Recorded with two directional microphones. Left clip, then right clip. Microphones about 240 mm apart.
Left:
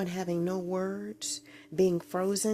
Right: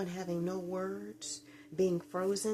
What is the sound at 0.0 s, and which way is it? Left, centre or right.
Speech, left.